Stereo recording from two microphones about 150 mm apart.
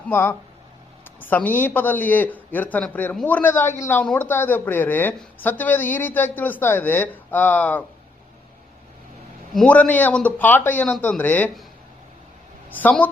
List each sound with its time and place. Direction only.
0.1 s speech: 15° left (ahead or behind)
4.0 s speech: 5° left (ahead or behind)
9.6 s speech: 10° left (ahead or behind)
12.7 s speech: 10° left (ahead or behind)